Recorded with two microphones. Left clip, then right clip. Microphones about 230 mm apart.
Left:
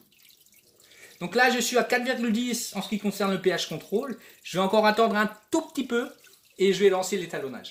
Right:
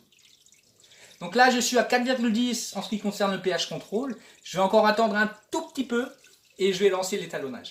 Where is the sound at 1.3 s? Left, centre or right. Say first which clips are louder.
Right 2 dB; left.